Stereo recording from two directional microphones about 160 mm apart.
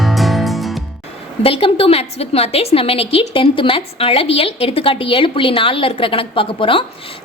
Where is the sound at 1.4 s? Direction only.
35° left (ahead or behind).